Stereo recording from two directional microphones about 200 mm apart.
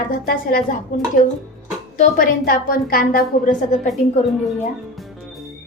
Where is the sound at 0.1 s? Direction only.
50° left (ahead or behind).